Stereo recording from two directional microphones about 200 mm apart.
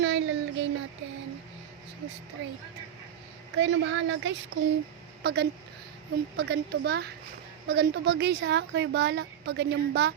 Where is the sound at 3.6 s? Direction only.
70° right (ahead or behind).